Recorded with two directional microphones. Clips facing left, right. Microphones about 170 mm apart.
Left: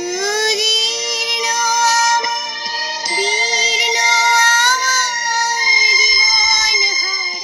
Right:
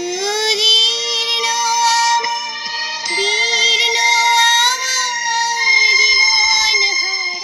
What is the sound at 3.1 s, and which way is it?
Music, 45° left (ahead or behind).